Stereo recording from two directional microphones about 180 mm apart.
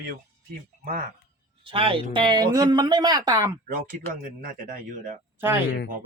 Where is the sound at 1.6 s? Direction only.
30° right (ahead or behind).